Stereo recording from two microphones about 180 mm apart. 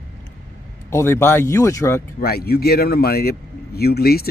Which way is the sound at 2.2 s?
55° left (ahead or behind).